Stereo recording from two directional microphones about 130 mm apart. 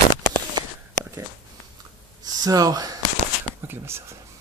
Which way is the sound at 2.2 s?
30° right (ahead or behind).